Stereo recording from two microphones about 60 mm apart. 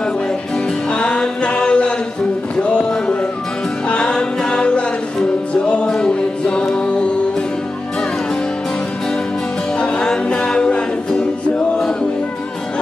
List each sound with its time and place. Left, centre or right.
0.9 s chant: centre
2.6 s music: centre
9.8 s music: centre